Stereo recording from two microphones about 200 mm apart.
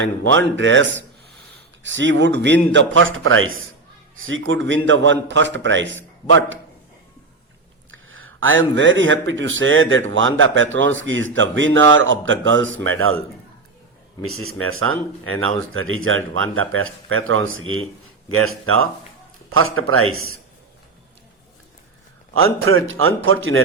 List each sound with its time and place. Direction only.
0.3 s a man's voice: 65° right (ahead or behind)
7.9 s speech: 85° right
22.4 s speech: 90° right